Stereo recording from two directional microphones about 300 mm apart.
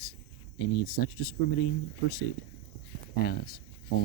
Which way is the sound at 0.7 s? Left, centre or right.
Left.